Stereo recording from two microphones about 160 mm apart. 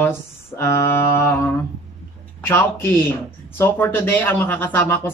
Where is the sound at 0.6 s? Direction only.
15° left (ahead or behind).